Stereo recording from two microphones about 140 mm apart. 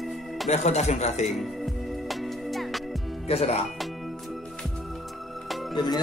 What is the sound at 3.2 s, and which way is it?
Speech, 45° left (ahead or behind).